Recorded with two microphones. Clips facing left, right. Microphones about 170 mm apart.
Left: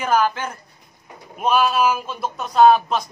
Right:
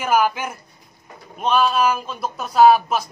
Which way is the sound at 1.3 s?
5° left (ahead or behind).